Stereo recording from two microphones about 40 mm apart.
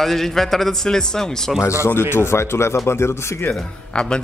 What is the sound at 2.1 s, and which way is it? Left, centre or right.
Speech, left.